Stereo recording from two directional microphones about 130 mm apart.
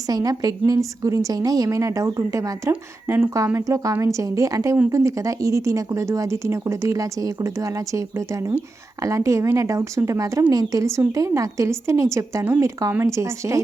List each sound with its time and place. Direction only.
0.1 s speech: 30° right (ahead or behind)